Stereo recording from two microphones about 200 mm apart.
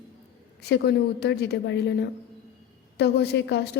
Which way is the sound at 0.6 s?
55° left (ahead or behind).